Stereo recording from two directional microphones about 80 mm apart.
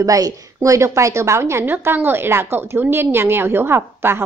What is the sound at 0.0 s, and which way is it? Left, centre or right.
A woman's voice, right.